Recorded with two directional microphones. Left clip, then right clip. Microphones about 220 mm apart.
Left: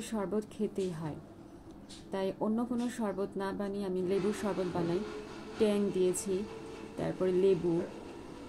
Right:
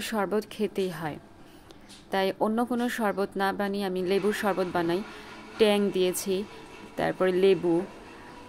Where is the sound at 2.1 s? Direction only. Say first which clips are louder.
Right 8 dB; 50° right (ahead or behind).